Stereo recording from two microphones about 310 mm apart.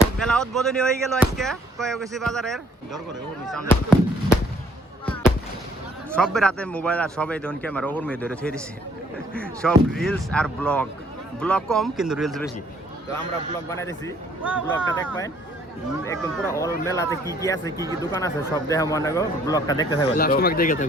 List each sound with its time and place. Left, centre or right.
0.2 s speech: centre
6.1 s speech: centre
13.7 s speech: centre
20.1 s speech: left